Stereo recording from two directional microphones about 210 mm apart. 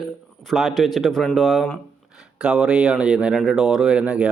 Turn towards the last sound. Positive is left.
turn(degrees=-5)  # may be behind; listen again after turning